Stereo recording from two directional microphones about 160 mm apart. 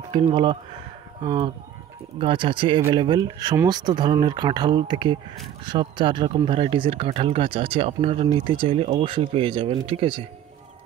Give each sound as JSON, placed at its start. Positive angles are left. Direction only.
{"t": 0.1, "sound": "speech", "side_deg": -30}